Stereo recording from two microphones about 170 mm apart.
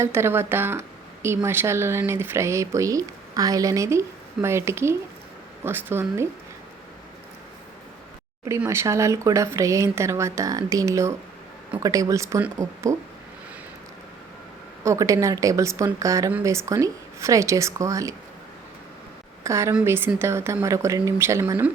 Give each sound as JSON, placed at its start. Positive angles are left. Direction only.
{"t": 0.0, "sound": "speech", "side_deg": -15}
{"t": 8.4, "sound": "a woman's voice", "side_deg": -15}
{"t": 14.8, "sound": "a woman's voice", "side_deg": -20}
{"t": 19.5, "sound": "speech", "side_deg": -15}